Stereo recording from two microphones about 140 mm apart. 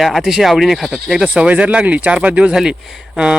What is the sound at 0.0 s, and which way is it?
Speech, centre (ahead or behind).